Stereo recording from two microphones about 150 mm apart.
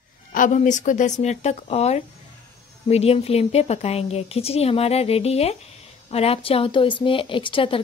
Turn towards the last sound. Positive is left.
turn(degrees=35)  # may be behind; listen again after turning